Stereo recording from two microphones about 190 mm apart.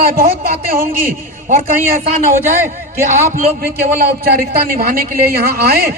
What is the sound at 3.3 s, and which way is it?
A man's voice, 50° right (ahead or behind).